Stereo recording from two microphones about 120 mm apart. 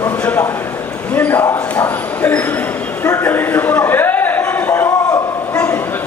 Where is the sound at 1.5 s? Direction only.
10° left (ahead or behind).